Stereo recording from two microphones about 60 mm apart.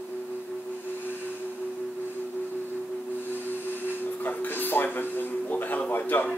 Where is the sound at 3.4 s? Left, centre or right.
Left.